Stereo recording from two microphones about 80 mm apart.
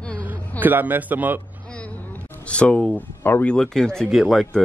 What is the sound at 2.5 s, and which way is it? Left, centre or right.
Speech, centre.